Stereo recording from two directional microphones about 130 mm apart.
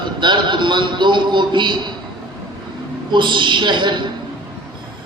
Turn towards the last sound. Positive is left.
turn(degrees=-35)  # may be behind; listen again after turning